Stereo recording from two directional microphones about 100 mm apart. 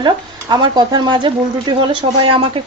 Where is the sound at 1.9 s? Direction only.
60° right (ahead or behind).